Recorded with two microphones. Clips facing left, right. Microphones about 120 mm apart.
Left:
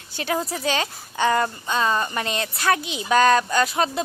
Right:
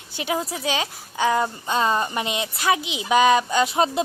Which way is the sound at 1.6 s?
20° right (ahead or behind).